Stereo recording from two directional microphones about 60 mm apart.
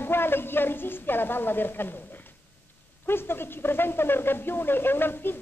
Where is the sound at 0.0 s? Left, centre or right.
Left.